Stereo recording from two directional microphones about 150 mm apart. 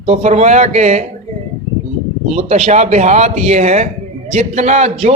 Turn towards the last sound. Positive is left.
turn(degrees=-50)  # may be behind; listen again after turning